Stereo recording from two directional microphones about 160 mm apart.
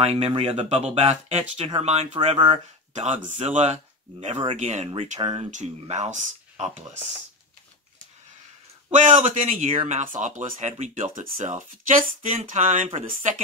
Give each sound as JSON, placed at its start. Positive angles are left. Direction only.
{"t": 0.0, "sound": "speech", "side_deg": -40}
{"t": 2.9, "sound": "speech", "side_deg": -45}
{"t": 8.9, "sound": "speech", "side_deg": -50}